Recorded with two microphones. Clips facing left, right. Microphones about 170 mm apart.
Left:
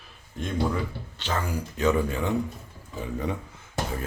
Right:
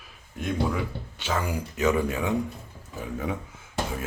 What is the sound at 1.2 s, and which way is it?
Speech, 10° right (ahead or behind).